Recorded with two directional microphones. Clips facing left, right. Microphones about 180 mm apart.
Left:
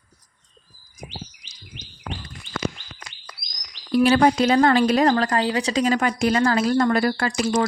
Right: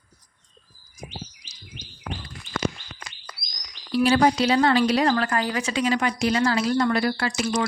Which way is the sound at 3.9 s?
50° left (ahead or behind).